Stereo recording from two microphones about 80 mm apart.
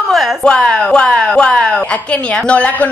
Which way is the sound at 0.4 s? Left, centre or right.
Centre.